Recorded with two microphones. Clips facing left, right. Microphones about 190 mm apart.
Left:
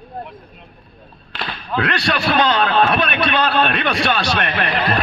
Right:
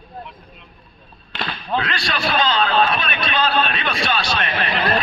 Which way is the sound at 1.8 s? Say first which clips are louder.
Left 5 dB; 65° left (ahead or behind).